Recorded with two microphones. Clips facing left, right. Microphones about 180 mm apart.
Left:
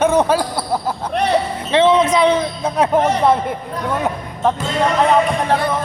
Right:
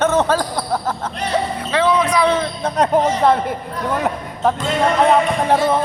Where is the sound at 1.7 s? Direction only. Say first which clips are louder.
Left 4 dB; 25° left (ahead or behind); by 3.6 s centre (ahead or behind).